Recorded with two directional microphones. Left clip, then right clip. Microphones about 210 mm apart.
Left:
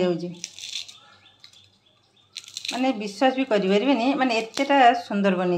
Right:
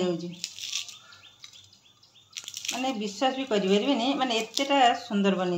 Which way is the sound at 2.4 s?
10° right (ahead or behind).